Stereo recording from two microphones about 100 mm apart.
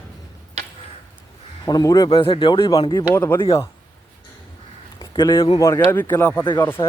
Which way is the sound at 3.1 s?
25° left (ahead or behind).